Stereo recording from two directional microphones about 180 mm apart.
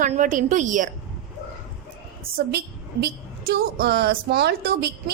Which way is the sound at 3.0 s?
60° right (ahead or behind).